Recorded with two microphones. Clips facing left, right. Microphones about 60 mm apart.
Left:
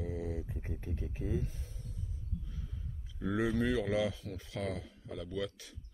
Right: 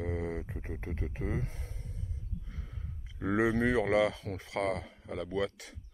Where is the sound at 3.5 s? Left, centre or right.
Right.